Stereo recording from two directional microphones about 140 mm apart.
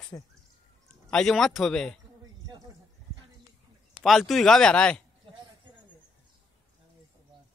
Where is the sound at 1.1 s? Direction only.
5° left (ahead or behind).